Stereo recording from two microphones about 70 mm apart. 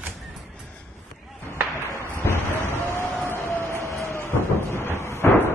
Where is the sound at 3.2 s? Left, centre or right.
Left.